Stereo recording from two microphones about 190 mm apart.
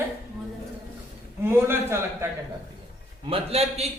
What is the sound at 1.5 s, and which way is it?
Speech, 10° right (ahead or behind).